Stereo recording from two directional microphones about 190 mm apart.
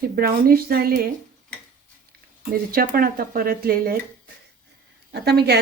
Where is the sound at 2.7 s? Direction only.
50° right (ahead or behind).